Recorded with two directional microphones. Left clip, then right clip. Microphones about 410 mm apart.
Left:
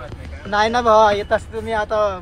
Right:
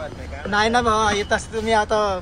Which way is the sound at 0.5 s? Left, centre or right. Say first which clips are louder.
Left 4 dB; centre.